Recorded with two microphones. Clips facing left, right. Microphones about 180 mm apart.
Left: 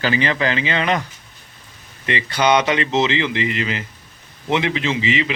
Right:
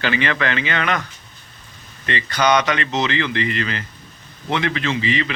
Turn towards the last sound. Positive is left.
turn(degrees=20)  # may be behind; listen again after turning